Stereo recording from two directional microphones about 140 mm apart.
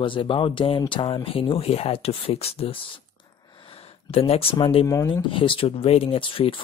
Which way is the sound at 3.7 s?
45° left (ahead or behind).